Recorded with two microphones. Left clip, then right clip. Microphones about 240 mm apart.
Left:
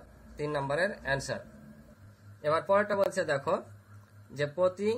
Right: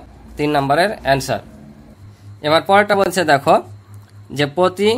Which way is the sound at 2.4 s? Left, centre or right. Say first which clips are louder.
Right 14 dB; right.